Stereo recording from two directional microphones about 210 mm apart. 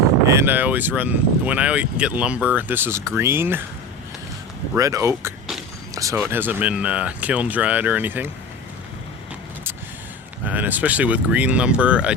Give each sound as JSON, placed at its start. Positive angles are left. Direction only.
{"t": 0.3, "sound": "speech", "side_deg": -10}
{"t": 4.7, "sound": "speech", "side_deg": -15}
{"t": 5.9, "sound": "a sound", "side_deg": -15}
{"t": 6.3, "sound": "speech", "side_deg": -10}
{"t": 10.4, "sound": "speech", "side_deg": -10}